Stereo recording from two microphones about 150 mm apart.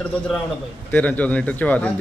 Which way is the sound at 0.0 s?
5° left (ahead or behind).